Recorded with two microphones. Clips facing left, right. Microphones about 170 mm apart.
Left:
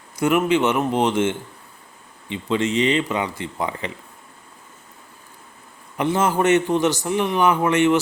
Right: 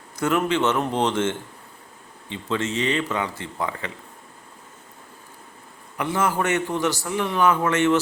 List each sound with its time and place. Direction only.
0.2 s speech: 10° left (ahead or behind)
6.0 s a man's voice: 20° left (ahead or behind)